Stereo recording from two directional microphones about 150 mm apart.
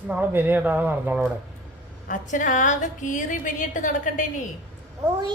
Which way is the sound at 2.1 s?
60° left (ahead or behind).